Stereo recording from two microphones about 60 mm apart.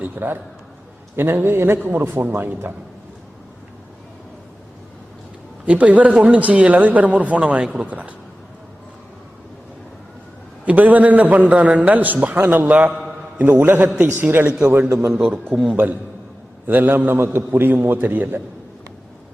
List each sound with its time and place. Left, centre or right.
0.0 s a man's voice: right
5.6 s speech: right
10.7 s speech: right
12.9 s a sound: centre
13.4 s a man's voice: right
14.6 s a man's voice: right
14.8 s a man's voice: right
15.1 s a man's voice: right